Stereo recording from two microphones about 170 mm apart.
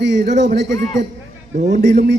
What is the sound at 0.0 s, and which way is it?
Speech, 90° right.